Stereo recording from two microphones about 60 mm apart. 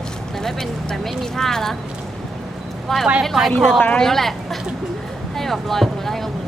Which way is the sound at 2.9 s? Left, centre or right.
Centre.